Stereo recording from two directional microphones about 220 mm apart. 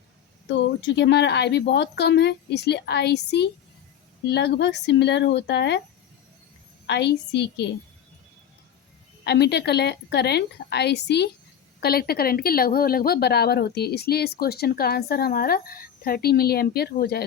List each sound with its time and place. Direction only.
0.5 s speech: 55° left (ahead or behind)
6.8 s speech: 50° left (ahead or behind)
9.2 s speech: 50° left (ahead or behind)